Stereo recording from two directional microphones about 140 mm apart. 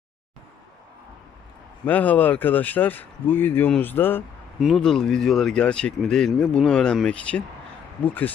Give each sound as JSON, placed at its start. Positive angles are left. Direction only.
{"t": 1.8, "sound": "speech", "side_deg": 10}
{"t": 4.6, "sound": "speech", "side_deg": 0}